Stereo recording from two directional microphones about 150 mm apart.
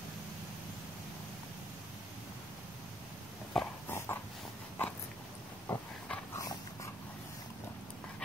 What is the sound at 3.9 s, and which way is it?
Dog, 15° left (ahead or behind).